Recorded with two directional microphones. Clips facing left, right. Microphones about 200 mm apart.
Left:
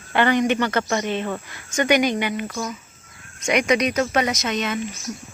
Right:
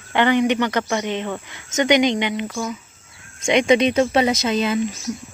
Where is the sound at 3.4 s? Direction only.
25° right (ahead or behind).